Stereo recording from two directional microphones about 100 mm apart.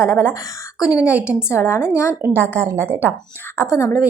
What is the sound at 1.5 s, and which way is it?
Speech, 25° left (ahead or behind).